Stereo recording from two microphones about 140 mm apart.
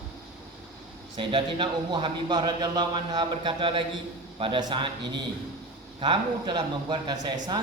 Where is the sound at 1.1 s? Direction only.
35° right (ahead or behind).